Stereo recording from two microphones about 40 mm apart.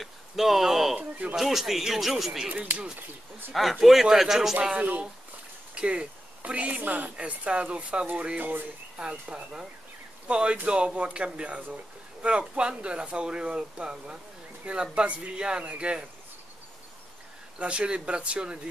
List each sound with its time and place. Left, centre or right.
0.0 s a sound: centre
1.3 s speech: centre
2.5 s speech: right
3.8 s speech: centre
4.7 s speech: right
5.8 s speech: right
7.2 s speech: right
8.9 s speech: right
17.6 s speech: right